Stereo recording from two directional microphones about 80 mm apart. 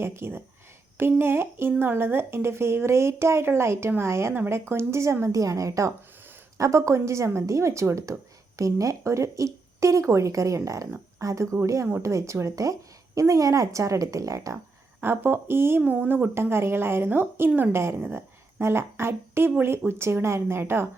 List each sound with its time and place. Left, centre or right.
0.0 s a woman's voice: right
15.0 s a woman's voice: right